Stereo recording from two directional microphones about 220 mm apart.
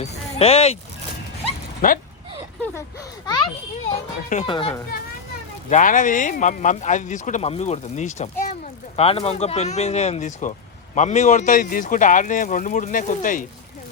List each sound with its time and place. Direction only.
0.0 s speech: 25° left (ahead or behind)
1.8 s speech: 40° left (ahead or behind)
3.2 s a child's voice: 20° left (ahead or behind)
5.7 s speech: 35° left (ahead or behind)